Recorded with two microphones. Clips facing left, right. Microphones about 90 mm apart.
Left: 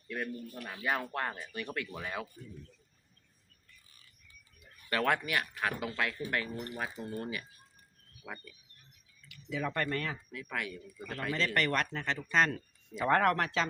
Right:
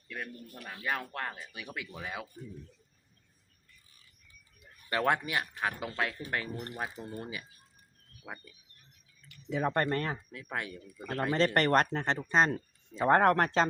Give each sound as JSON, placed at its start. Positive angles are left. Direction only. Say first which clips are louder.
{"t": 0.1, "sound": "speech", "louder": "left 4 dB", "side_deg": 0}
{"t": 4.9, "sound": "speech", "louder": "right 1 dB", "side_deg": -25}
{"t": 9.3, "sound": "speech", "louder": "right 5 dB", "side_deg": -35}